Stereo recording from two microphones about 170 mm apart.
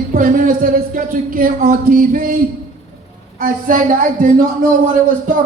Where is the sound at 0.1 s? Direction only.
55° right (ahead or behind).